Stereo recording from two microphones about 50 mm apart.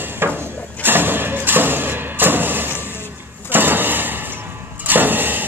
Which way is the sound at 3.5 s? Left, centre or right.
Right.